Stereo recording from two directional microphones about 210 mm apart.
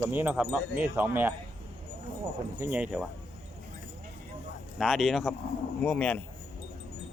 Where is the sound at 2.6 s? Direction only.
5° right (ahead or behind).